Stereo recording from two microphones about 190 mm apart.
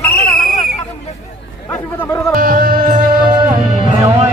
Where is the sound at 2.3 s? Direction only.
50° right (ahead or behind).